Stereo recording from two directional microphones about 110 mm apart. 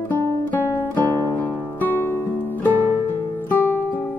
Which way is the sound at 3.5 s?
20° left (ahead or behind).